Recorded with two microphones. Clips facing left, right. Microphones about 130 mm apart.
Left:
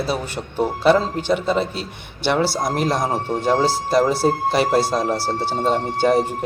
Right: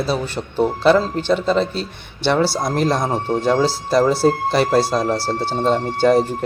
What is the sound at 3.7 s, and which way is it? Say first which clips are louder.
Speech: right 1 dB; 50° left (ahead or behind).